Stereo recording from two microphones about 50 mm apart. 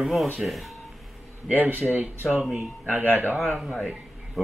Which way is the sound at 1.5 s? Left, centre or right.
Right.